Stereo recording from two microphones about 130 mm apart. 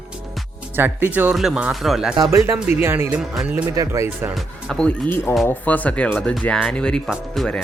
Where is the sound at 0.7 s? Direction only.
15° right (ahead or behind).